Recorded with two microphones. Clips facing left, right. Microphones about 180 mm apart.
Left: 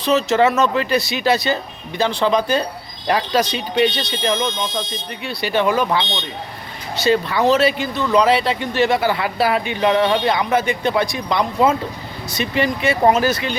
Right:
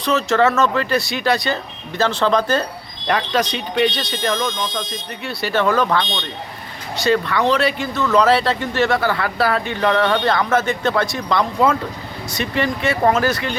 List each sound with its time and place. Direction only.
0.1 s speech: 20° left (ahead or behind); by 4.1 s centre (ahead or behind)
4.2 s speech: 25° left (ahead or behind)
7.1 s speech: 25° left (ahead or behind)
7.8 s speech: 15° left (ahead or behind)